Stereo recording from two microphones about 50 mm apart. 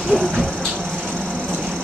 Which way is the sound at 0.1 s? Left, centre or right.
Centre.